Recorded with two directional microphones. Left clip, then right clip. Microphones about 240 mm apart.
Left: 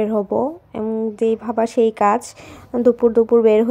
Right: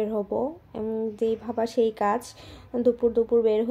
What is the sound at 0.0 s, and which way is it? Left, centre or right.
Speech, left.